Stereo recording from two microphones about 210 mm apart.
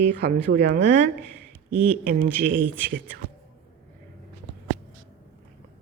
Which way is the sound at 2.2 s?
60° right (ahead or behind).